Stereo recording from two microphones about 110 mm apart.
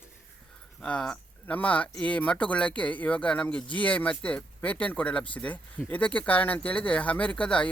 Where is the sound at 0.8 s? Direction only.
5° left (ahead or behind).